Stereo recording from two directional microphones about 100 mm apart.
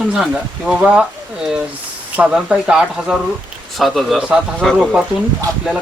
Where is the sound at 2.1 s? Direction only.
10° right (ahead or behind).